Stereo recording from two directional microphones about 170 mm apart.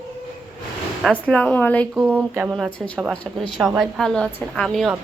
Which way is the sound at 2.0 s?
10° right (ahead or behind).